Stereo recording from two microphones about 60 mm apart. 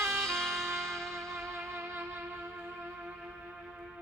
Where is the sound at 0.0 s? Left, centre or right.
Right.